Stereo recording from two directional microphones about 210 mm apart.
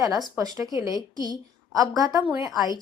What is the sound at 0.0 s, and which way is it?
Speech, 20° right (ahead or behind).